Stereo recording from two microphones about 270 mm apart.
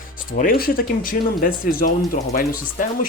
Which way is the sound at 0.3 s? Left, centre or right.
Left.